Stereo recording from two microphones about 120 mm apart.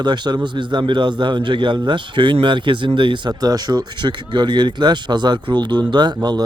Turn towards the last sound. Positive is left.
turn(degrees=-35)  # may be behind; listen again after turning